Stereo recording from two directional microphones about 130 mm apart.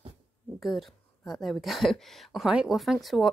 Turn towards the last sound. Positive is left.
turn(degrees=0)  # may be behind; listen again after turning